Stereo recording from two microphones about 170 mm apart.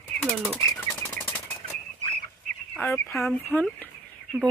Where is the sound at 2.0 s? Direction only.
45° right (ahead or behind).